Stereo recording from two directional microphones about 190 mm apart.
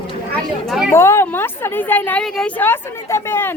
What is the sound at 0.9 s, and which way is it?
Speech, 15° left (ahead or behind).